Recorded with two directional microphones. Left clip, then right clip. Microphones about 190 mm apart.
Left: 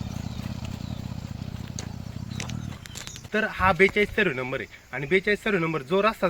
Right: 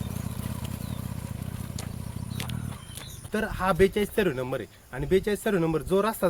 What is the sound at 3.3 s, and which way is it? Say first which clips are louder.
Speech: left 3 dB; 30° right (ahead or behind).